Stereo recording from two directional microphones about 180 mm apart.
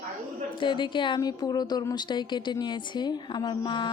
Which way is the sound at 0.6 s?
25° left (ahead or behind).